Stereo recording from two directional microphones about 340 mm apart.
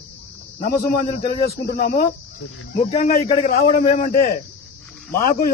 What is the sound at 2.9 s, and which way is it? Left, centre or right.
Speech, left.